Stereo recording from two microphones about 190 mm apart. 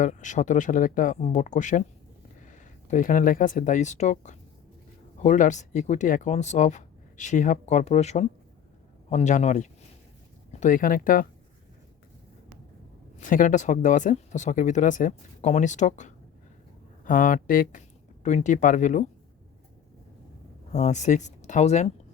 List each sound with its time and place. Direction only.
0.0 s speech: 40° left (ahead or behind)
13.1 s speech: 45° left (ahead or behind)
20.7 s speech: 40° left (ahead or behind)